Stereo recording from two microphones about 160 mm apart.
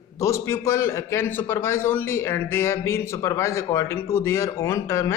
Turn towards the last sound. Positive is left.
turn(degrees=20)  # may be behind; listen again after turning